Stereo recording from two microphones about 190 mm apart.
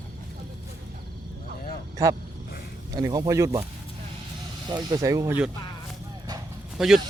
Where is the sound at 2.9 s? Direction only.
20° right (ahead or behind).